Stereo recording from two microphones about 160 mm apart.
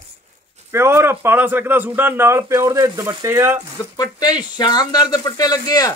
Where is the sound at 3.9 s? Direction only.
25° left (ahead or behind).